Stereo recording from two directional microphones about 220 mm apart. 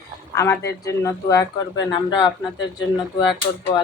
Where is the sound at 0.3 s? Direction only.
15° left (ahead or behind).